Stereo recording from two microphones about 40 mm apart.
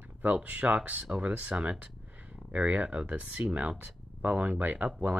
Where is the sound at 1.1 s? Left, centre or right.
Right.